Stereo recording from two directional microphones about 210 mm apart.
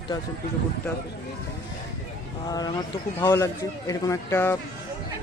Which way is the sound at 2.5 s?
20° left (ahead or behind).